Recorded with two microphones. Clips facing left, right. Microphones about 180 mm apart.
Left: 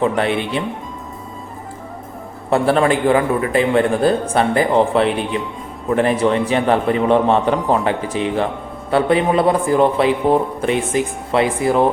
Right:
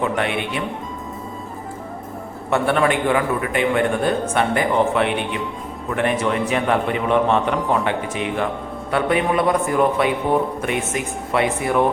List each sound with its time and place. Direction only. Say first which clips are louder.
0.0 s speech: left 4 dB; 35° left (ahead or behind)
2.5 s speech: left 3 dB; 30° left (ahead or behind)